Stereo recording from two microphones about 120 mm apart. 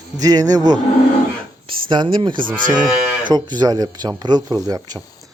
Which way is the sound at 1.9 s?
40° right (ahead or behind).